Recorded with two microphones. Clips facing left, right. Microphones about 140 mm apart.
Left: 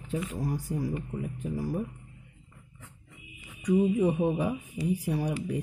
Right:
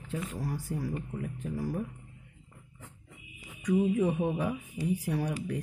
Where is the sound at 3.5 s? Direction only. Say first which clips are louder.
Left 2 dB; 10° left (ahead or behind).